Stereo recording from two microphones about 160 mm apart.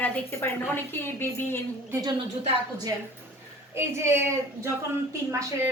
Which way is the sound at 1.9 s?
20° right (ahead or behind).